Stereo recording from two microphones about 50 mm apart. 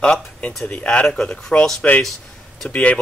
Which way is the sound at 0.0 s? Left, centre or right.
Left.